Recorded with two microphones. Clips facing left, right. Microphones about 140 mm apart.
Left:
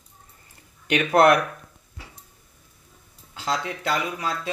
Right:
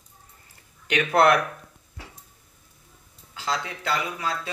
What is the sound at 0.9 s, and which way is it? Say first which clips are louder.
Speech: left 2 dB; 45° left (ahead or behind).